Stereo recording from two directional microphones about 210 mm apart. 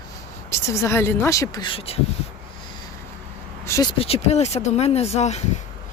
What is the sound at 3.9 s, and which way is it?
Speech, 30° left (ahead or behind).